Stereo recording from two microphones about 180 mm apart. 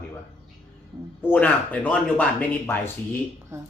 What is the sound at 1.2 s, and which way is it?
Speech, 10° left (ahead or behind).